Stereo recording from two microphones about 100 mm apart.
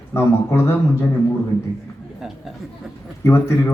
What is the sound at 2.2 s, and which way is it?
Chatter, 5° right (ahead or behind).